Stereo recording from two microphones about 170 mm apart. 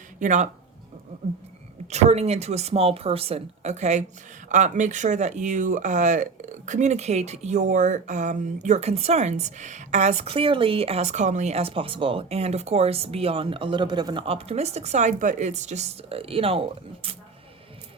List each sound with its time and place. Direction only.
0.2 s speech: 45° right (ahead or behind)
1.9 s speech: 40° right (ahead or behind)